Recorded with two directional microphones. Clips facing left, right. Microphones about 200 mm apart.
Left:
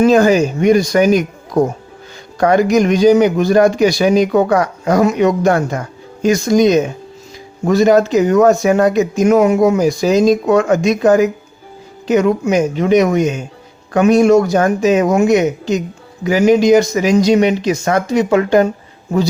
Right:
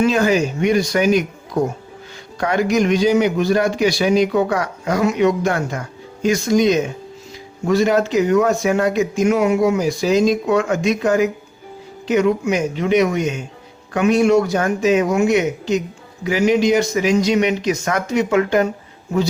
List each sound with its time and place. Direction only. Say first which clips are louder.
0.0 s speech: left 6 dB; 40° left (ahead or behind)
2.4 s speech: left 6 dB; 40° left (ahead or behind)